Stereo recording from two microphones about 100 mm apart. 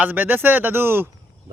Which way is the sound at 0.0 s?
20° right (ahead or behind).